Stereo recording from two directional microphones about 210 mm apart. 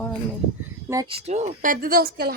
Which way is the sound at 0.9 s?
20° right (ahead or behind).